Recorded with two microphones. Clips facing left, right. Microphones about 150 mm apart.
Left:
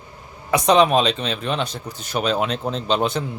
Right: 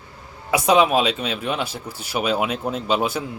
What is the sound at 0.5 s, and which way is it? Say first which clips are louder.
Speech: left 1 dB; 5° right (ahead or behind).